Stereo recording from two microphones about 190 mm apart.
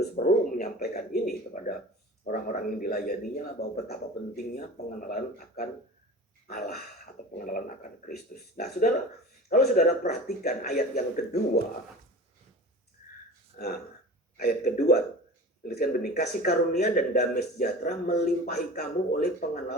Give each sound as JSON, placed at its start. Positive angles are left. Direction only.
{"t": 0.2, "sound": "speech", "side_deg": 45}
{"t": 13.6, "sound": "speech", "side_deg": 45}
{"t": 14.3, "sound": "speech", "side_deg": 55}